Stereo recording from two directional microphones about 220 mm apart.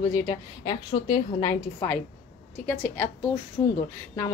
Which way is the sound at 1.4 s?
15° left (ahead or behind).